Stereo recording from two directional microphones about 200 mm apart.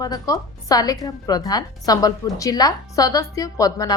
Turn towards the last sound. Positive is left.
turn(degrees=20)  # may be behind; listen again after turning